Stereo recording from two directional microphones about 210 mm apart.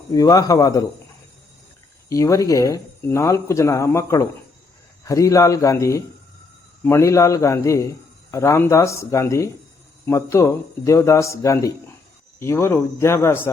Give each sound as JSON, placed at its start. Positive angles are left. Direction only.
{"t": 0.1, "sound": "a man's voice", "side_deg": 15}
{"t": 2.0, "sound": "a man's voice", "side_deg": 15}